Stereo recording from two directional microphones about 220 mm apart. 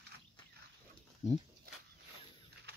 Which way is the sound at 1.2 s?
30° left (ahead or behind).